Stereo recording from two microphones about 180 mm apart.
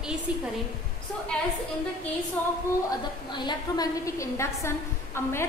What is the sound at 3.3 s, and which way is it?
A woman's voice, 25° left (ahead or behind).